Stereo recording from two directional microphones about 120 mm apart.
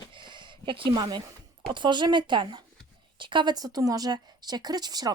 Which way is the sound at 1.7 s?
40° right (ahead or behind).